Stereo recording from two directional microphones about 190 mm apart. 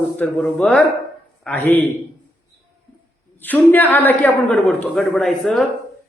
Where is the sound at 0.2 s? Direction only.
5° left (ahead or behind).